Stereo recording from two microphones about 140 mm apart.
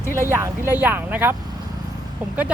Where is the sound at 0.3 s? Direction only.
20° right (ahead or behind).